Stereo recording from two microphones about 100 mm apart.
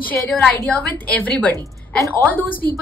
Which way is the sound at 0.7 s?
15° left (ahead or behind).